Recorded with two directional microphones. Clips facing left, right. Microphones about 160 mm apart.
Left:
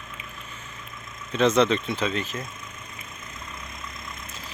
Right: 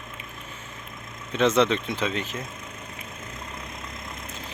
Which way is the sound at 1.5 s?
15° left (ahead or behind).